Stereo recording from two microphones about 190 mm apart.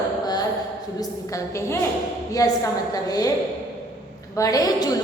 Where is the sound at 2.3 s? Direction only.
20° left (ahead or behind).